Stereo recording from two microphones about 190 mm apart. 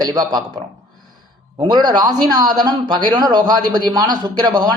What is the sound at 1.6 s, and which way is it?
Speech, 20° right (ahead or behind).